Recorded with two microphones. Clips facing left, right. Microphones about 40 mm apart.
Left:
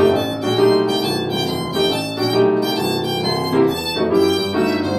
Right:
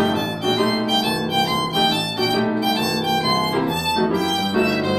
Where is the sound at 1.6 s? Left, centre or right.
Right.